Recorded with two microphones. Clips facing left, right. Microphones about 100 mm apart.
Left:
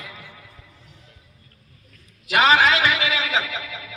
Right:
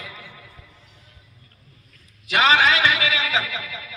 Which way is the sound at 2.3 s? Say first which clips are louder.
Left 1 dB; 35° left (ahead or behind).